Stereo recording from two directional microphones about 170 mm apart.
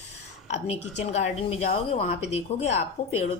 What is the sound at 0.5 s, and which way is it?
A woman's voice, 40° left (ahead or behind).